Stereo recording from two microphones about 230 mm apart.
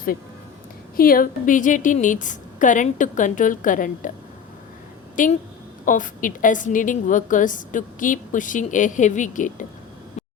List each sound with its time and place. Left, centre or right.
0.9 s a woman's voice: left
5.2 s a woman's voice: left